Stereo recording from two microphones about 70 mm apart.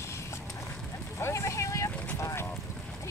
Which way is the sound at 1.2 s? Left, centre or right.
Left.